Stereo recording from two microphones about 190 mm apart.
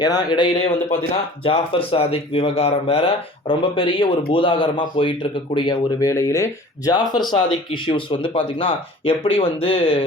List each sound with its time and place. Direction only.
0.0 s speech: 20° left (ahead or behind)